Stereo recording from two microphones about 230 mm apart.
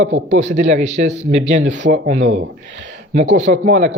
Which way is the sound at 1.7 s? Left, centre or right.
Right.